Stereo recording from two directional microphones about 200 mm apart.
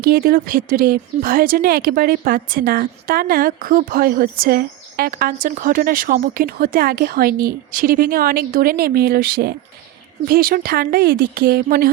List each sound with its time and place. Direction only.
0.0 s speech: 50° right (ahead or behind)